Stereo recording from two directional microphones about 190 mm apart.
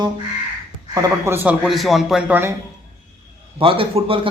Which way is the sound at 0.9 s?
15° right (ahead or behind).